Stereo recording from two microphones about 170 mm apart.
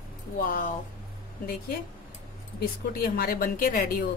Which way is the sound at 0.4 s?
55° left (ahead or behind).